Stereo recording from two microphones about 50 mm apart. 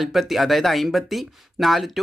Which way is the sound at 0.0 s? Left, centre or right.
Centre.